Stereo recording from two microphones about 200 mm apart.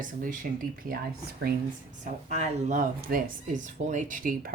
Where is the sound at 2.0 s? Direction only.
35° right (ahead or behind).